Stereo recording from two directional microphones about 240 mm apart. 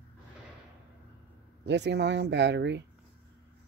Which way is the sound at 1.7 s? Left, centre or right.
Right.